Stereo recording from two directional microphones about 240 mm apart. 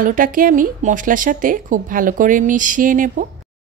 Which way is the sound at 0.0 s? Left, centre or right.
Right.